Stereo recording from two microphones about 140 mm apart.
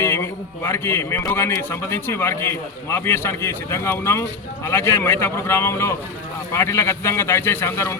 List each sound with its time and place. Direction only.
0.0 s a man's voice: 20° left (ahead or behind)